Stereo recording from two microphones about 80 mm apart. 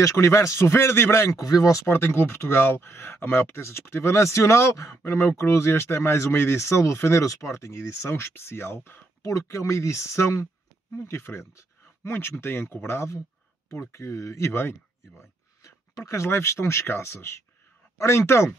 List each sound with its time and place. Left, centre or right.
0.0 s speech: left
1.3 s speech: left
1.9 s speech: left